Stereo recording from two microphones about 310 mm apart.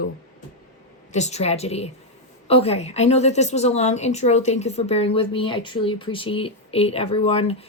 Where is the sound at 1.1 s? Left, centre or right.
Left.